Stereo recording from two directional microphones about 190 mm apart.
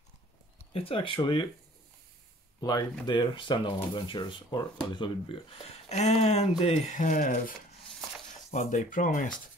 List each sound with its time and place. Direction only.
0.7 s speech: 30° left (ahead or behind)
2.6 s speech: 20° left (ahead or behind); by 9.3 s 45° left (ahead or behind)